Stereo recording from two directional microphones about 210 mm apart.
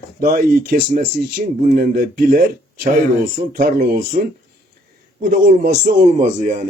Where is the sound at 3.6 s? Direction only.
45° right (ahead or behind).